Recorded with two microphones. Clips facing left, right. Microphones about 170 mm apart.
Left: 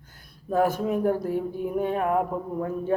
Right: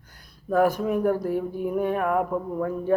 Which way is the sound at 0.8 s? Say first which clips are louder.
Right 1 dB; 20° left (ahead or behind).